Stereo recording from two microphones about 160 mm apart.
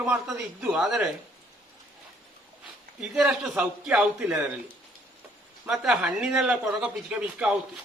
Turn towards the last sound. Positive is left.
turn(degrees=-5)  # may be behind; listen again after turning